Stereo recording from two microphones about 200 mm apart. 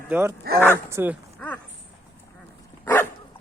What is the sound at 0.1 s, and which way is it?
Speech, 10° right (ahead or behind).